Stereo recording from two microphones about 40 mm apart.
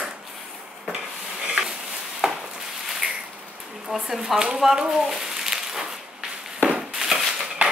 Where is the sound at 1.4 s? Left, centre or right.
Right.